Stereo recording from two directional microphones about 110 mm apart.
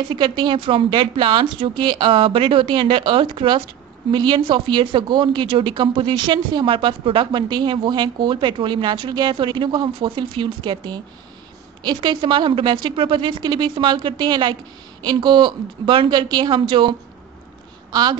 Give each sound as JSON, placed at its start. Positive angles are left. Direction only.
{"t": 0.1, "sound": "a woman's voice", "side_deg": -45}